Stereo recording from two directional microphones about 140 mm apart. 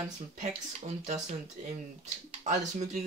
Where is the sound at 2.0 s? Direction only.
55° right (ahead or behind).